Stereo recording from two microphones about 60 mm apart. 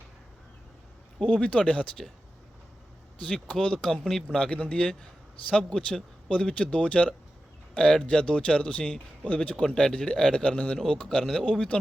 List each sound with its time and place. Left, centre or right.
1.2 s speech: centre
3.4 s a man's voice: centre
9.6 s a man's voice: centre
11.2 s speech: centre
11.5 s a man's voice: centre